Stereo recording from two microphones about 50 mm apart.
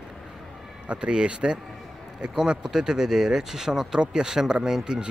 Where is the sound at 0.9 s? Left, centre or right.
Right.